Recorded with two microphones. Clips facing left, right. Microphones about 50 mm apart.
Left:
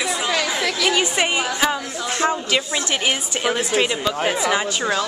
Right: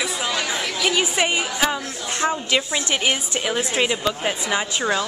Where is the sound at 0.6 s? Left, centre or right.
Left.